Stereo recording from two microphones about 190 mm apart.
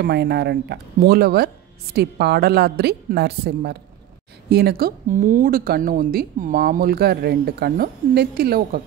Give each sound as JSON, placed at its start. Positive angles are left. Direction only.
{"t": 0.0, "sound": "a woman's voice", "side_deg": -60}